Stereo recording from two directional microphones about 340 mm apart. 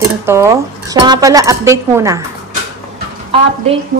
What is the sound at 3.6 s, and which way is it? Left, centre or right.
Speech, centre.